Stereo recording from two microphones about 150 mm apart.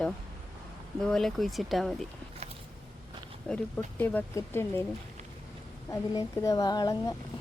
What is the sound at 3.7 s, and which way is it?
Speech, 10° left (ahead or behind).